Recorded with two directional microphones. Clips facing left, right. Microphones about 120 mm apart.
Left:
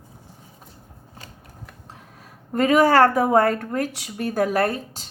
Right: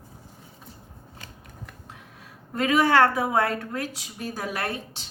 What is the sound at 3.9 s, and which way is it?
A woman's voice, 60° left (ahead or behind).